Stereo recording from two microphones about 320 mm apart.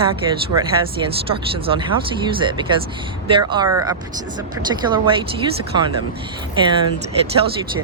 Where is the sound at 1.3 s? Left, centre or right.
Centre.